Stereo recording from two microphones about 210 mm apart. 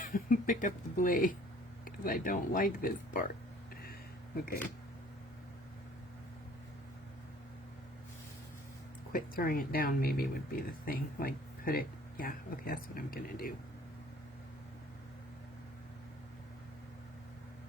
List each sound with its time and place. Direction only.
0.0 s speech: 40° left (ahead or behind)
9.1 s speech: 45° left (ahead or behind)